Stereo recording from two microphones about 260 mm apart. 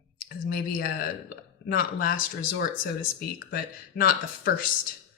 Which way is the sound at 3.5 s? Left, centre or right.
Left.